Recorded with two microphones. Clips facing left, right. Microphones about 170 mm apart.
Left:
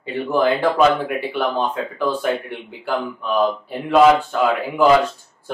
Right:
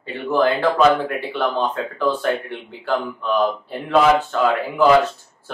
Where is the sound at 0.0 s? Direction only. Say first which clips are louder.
Even; 15° left (ahead or behind).